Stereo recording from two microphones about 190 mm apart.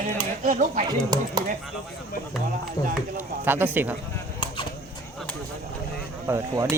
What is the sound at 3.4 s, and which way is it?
Speech, 10° right (ahead or behind).